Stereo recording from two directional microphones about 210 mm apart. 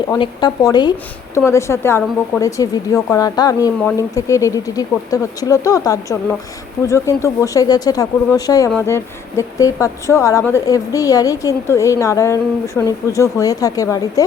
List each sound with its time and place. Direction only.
0.1 s a woman's voice: 20° left (ahead or behind)